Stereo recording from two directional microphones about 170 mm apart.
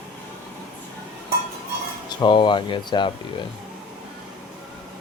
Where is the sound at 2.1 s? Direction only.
25° left (ahead or behind).